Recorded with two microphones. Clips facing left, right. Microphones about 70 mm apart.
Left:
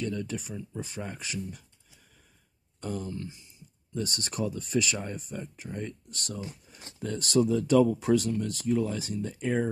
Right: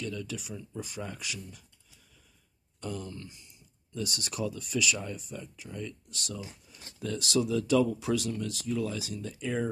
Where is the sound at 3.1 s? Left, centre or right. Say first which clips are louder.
Left 6 dB; left.